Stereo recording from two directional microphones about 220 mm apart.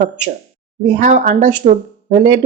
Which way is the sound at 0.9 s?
35° right (ahead or behind).